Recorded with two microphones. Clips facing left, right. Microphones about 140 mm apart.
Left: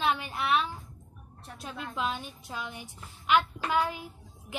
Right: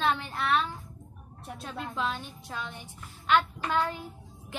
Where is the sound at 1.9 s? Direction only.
15° left (ahead or behind).